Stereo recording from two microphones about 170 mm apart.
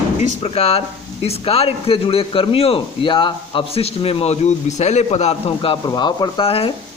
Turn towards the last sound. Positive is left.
turn(degrees=35)  # may be behind; listen again after turning